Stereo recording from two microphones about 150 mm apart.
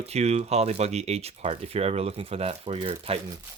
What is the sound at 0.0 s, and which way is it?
Speech, 45° right (ahead or behind).